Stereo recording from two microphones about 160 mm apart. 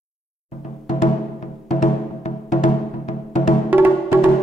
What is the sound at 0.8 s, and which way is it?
Music, 50° left (ahead or behind).